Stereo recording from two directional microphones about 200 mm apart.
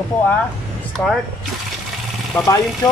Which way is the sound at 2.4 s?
5° left (ahead or behind).